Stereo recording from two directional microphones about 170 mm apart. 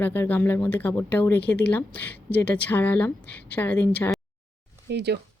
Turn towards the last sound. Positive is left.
turn(degrees=-80)